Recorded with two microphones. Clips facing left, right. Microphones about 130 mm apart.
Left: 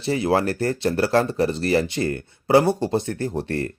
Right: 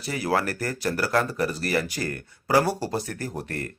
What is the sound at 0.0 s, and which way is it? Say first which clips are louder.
Speech: left 5 dB; 25° left (ahead or behind).